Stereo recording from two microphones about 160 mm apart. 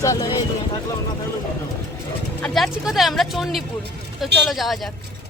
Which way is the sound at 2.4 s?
Centre (ahead or behind).